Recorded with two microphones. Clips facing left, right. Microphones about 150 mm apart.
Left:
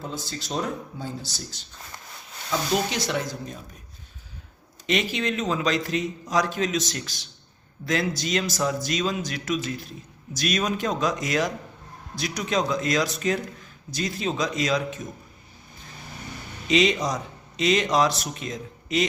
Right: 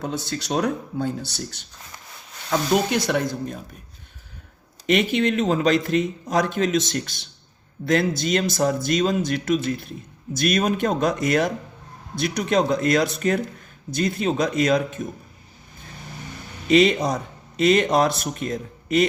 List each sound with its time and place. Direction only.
0.0 s speech: 70° right (ahead or behind)
4.9 s a man's voice: 50° right (ahead or behind)
16.6 s a man's voice: 50° right (ahead or behind)